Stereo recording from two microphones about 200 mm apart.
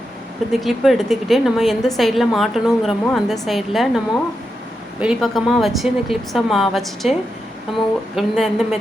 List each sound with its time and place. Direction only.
0.6 s a woman's voice: centre (ahead or behind)